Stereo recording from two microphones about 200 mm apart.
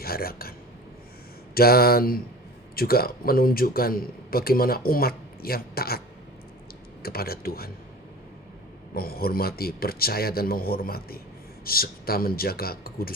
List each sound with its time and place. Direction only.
0.0 s speech: 50° left (ahead or behind)
1.5 s a man's voice: 50° left (ahead or behind)
7.0 s a man's voice: 50° left (ahead or behind)
8.9 s a man's voice: 50° left (ahead or behind)